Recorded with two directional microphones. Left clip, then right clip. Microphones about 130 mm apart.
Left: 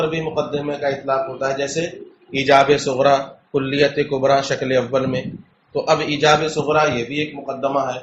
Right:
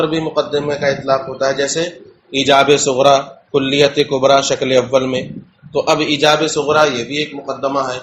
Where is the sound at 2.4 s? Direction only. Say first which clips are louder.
Right 3 dB; 40° right (ahead or behind); by 7.1 s 60° right (ahead or behind).